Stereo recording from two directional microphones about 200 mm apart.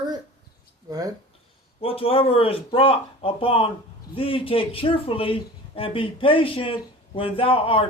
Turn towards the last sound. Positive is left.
turn(degrees=25)  # may be behind; listen again after turning